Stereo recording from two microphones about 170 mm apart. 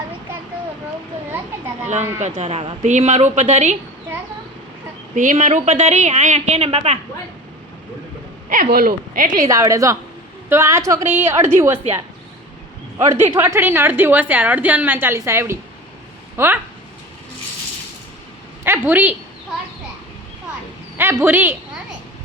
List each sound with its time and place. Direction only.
1.3 s children playing: 10° right (ahead or behind)
2.1 s a woman's voice: 40° right (ahead or behind)
5.1 s a woman's voice: 50° right (ahead or behind)
8.4 s speech: 60° right (ahead or behind)
9.5 s a woman's voice: 20° right (ahead or behind)
13.1 s a woman's voice: 15° right (ahead or behind)
18.6 s a woman's voice: 10° right (ahead or behind)
21.0 s a woman's voice: 15° right (ahead or behind)